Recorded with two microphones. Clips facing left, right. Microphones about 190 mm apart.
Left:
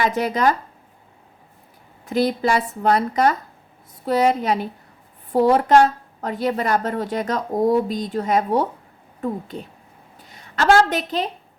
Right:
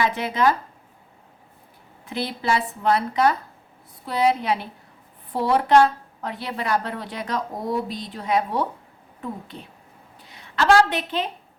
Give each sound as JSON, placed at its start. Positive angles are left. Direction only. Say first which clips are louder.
{"t": 0.0, "sound": "a woman's voice", "louder": "left 2 dB", "side_deg": 40}
{"t": 2.0, "sound": "a woman's voice", "louder": "left 6 dB", "side_deg": 40}
{"t": 10.3, "sound": "a woman's voice", "louder": "left 1 dB", "side_deg": 45}